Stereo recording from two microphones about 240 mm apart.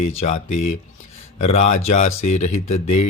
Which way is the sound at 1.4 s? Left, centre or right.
Left.